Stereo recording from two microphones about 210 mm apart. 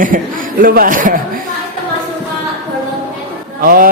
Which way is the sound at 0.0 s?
40° right (ahead or behind).